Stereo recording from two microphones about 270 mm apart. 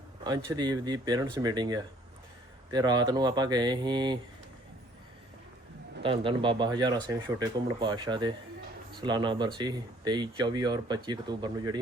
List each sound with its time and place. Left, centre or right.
0.3 s speech: centre
6.0 s speech: centre